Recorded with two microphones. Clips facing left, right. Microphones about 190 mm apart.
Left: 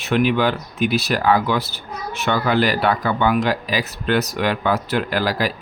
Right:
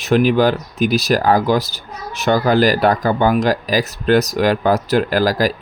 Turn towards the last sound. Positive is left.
turn(degrees=-40)  # may be behind; listen again after turning